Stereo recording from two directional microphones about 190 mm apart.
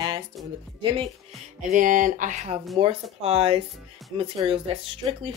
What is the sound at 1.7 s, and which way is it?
Speech, 45° right (ahead or behind).